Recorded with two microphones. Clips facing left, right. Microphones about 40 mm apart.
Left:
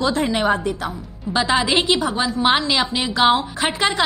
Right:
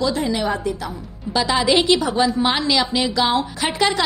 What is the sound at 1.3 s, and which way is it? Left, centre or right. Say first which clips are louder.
A woman's voice: right 1 dB; left.